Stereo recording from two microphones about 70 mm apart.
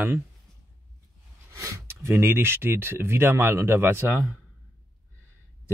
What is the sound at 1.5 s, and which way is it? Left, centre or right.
Speech, right.